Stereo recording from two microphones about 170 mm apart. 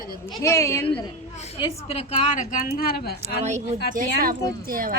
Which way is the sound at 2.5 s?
55° left (ahead or behind).